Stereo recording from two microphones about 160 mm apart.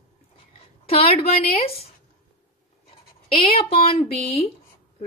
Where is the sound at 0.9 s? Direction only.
40° left (ahead or behind).